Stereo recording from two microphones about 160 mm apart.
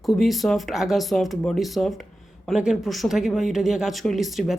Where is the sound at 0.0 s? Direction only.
Centre (ahead or behind).